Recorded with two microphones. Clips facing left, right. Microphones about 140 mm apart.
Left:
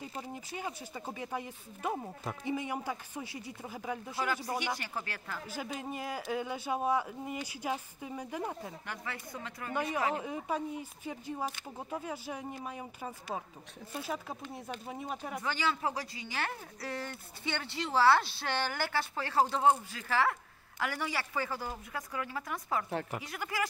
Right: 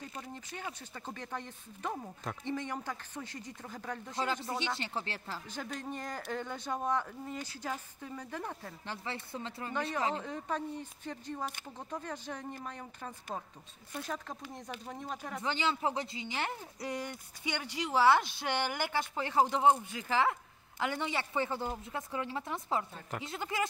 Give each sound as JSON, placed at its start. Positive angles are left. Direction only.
{"t": 0.2, "sound": "speech", "side_deg": 10}
{"t": 4.6, "sound": "speech", "side_deg": -25}
{"t": 5.8, "sound": "speech", "side_deg": 5}
{"t": 8.8, "sound": "speech", "side_deg": -30}
{"t": 9.7, "sound": "speech", "side_deg": 10}
{"t": 14.4, "sound": "speech", "side_deg": -5}
{"t": 14.9, "sound": "speech", "side_deg": 10}
{"t": 15.4, "sound": "speech", "side_deg": -20}